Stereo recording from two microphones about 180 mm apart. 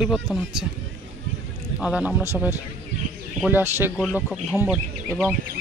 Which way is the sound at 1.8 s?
5° right (ahead or behind).